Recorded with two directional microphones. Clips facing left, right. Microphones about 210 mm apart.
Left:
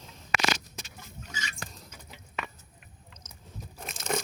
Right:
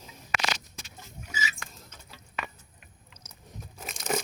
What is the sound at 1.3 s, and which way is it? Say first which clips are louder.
Pig: right 5 dB; 5° right (ahead or behind).